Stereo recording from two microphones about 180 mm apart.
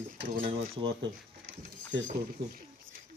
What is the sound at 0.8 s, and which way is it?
Speech, 35° right (ahead or behind).